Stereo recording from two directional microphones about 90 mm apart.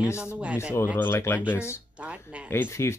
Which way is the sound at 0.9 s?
25° left (ahead or behind).